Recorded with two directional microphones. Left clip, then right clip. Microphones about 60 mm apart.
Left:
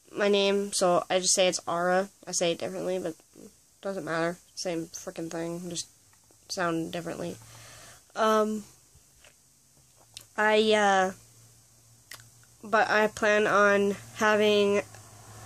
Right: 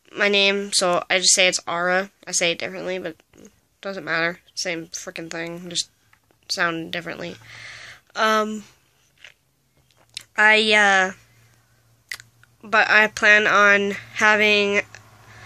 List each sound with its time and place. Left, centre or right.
0.1 s speech: left
1.6 s a woman's voice: centre; by 8.6 s left
10.1 s speech: left